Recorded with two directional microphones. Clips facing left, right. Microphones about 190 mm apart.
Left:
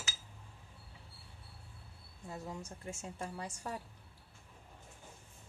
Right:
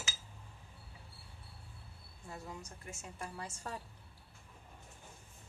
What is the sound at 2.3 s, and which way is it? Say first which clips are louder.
A woman's voice: left 3 dB; 25° left (ahead or behind).